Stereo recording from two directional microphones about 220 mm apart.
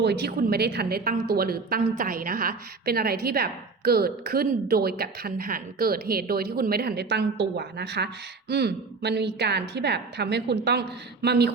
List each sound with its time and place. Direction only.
0.0 s a woman's voice: 50° right (ahead or behind)